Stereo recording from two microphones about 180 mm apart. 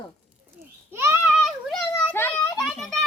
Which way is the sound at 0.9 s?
15° right (ahead or behind).